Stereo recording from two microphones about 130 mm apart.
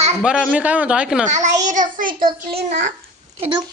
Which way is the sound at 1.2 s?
70° right (ahead or behind).